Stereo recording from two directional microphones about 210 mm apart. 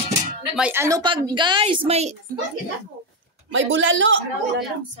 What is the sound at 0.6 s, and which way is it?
A woman's voice, 10° right (ahead or behind).